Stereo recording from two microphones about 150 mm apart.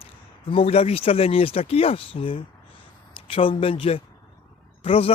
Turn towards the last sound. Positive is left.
turn(degrees=40)  # may be behind; listen again after turning